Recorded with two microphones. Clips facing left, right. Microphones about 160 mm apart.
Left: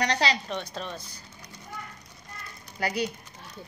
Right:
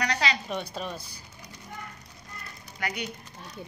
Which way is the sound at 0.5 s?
10° right (ahead or behind).